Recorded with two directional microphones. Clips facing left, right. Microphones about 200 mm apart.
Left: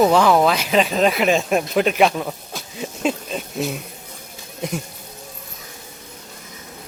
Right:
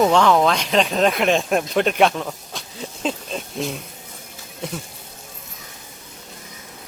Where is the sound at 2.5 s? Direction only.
5° left (ahead or behind).